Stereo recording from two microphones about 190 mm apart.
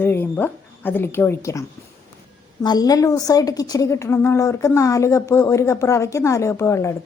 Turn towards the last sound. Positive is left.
turn(degrees=15)  # may be behind; listen again after turning